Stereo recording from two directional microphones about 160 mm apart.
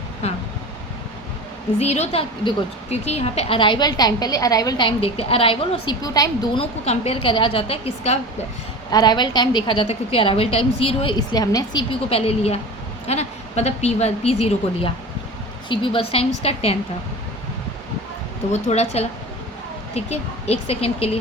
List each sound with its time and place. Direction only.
0.2 s a woman's voice: 40° left (ahead or behind)
1.8 s a woman's voice: 40° left (ahead or behind)
8.9 s a woman's voice: 25° left (ahead or behind)
11.2 s a woman's voice: 25° left (ahead or behind)
18.5 s a woman's voice: 45° left (ahead or behind)